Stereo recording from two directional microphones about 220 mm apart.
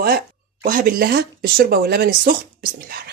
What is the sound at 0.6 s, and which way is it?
Speech, 40° right (ahead or behind).